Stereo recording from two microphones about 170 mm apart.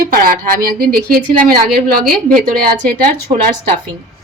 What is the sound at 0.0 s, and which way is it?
A woman's voice, 55° right (ahead or behind).